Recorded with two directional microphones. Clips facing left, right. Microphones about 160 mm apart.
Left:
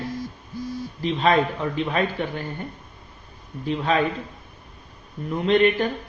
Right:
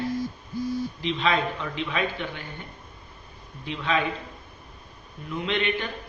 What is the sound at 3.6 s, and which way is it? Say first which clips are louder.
Speech: left 4 dB; 45° left (ahead or behind).